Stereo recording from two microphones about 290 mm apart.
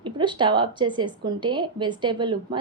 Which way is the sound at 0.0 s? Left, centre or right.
Centre.